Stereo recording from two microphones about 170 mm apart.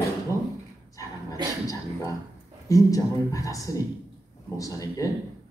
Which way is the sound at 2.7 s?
20° left (ahead or behind).